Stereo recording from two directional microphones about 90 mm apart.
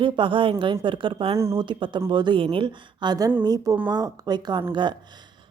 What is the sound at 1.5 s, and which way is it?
Speech, 65° right (ahead or behind).